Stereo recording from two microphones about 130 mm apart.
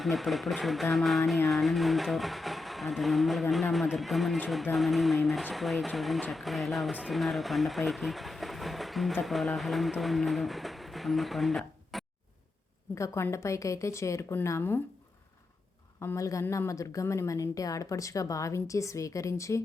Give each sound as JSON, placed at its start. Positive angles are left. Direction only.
{"t": 0.0, "sound": "speech", "side_deg": 0}
{"t": 12.9, "sound": "a woman's voice", "side_deg": 20}
{"t": 16.0, "sound": "a woman's voice", "side_deg": 25}